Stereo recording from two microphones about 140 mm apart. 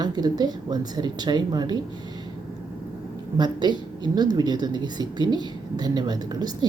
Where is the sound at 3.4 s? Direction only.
30° right (ahead or behind).